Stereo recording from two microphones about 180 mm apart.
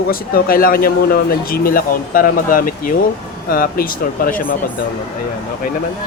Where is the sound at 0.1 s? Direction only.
55° left (ahead or behind).